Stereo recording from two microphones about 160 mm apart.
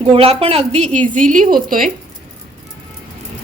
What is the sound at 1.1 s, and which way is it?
Speech, 55° right (ahead or behind).